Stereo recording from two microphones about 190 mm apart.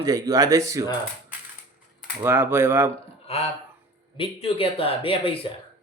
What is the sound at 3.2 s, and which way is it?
Speech, 30° left (ahead or behind).